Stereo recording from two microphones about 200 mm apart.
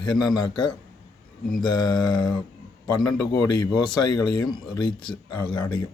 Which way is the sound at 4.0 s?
20° left (ahead or behind).